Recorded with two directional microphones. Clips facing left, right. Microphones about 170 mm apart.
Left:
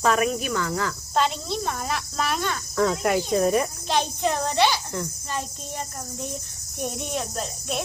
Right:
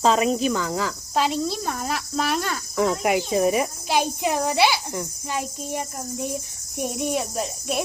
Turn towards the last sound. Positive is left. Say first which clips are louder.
# right 3 dB
turn(degrees=-5)  # may be behind; listen again after turning